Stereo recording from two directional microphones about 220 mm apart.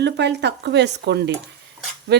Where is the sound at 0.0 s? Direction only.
50° right (ahead or behind).